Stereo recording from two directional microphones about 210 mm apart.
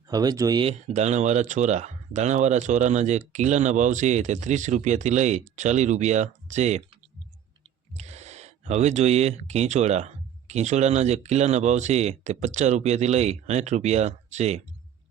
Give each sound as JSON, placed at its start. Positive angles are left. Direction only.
{"t": 0.1, "sound": "speech", "side_deg": -15}
{"t": 0.9, "sound": "speech", "side_deg": -35}
{"t": 7.9, "sound": "speech", "side_deg": -30}